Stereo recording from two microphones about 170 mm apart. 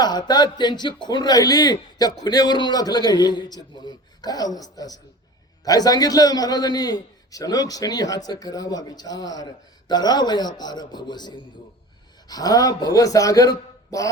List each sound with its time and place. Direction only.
0.0 s speech: 25° left (ahead or behind)